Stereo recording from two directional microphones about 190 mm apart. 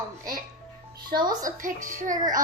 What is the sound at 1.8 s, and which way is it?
Speech, 45° right (ahead or behind).